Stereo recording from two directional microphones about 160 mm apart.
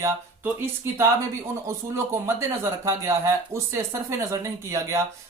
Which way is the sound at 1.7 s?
15° right (ahead or behind).